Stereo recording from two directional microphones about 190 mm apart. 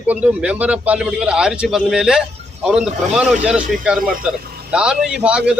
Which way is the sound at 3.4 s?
5° right (ahead or behind).